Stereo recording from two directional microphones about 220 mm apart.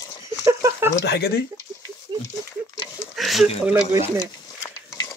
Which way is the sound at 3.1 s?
Centre (ahead or behind).